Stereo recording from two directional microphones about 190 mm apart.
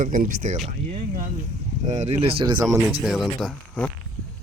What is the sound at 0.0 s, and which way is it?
Speech, 45° right (ahead or behind).